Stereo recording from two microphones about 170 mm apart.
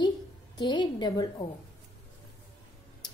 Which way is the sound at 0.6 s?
25° left (ahead or behind).